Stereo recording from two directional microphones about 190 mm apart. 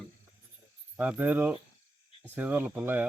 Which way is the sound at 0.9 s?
10° right (ahead or behind).